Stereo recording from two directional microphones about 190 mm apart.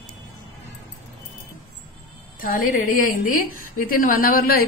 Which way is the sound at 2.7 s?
45° left (ahead or behind).